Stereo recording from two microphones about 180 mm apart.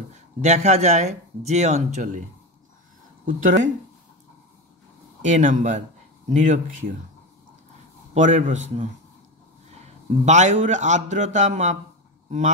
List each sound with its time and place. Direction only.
0.1 s speech: 40° right (ahead or behind)
3.3 s speech: 45° right (ahead or behind)
5.2 s speech: 45° right (ahead or behind)
8.1 s speech: 40° right (ahead or behind)
10.2 s speech: 40° right (ahead or behind)